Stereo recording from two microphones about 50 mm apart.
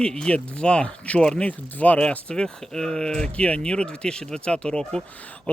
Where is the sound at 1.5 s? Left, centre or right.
Left.